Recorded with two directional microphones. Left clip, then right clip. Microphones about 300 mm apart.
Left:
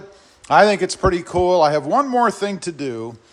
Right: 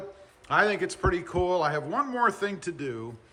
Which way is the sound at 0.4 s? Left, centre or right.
Centre.